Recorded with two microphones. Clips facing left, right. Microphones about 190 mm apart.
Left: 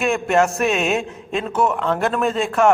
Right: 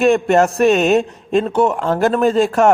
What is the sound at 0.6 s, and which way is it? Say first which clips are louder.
Speech: right 7 dB; centre (ahead or behind).